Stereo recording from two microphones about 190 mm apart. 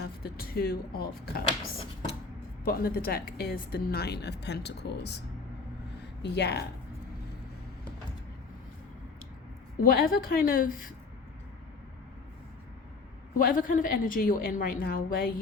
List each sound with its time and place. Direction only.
0.2 s a woman's voice: 55° left (ahead or behind)
6.2 s a woman's voice: 60° left (ahead or behind)
9.8 s a woman's voice: 50° left (ahead or behind)
13.4 s a woman's voice: 45° left (ahead or behind)